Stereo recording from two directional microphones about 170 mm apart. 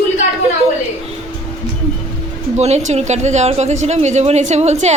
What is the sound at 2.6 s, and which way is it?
A woman's voice, 40° right (ahead or behind).